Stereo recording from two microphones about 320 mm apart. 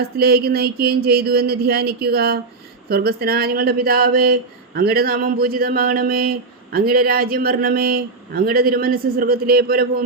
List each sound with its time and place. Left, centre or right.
0.0 s speech: right